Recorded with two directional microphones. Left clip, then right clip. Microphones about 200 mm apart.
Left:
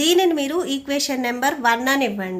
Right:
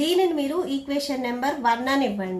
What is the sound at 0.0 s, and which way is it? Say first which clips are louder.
A woman's voice: left 4 dB; 45° left (ahead or behind).